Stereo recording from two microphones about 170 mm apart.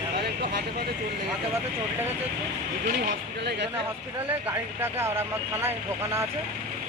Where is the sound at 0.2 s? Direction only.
70° right (ahead or behind).